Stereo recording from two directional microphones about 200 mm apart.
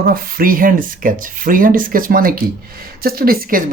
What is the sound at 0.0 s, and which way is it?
Speech, 45° right (ahead or behind).